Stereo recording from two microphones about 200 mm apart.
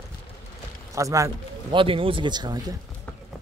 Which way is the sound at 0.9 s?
15° right (ahead or behind).